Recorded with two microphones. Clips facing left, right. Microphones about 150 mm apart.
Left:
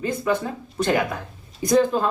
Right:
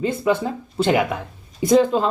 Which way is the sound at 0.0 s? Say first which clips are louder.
Right 3 dB; 25° right (ahead or behind).